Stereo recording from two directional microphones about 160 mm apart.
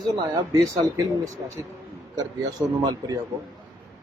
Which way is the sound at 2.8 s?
25° right (ahead or behind).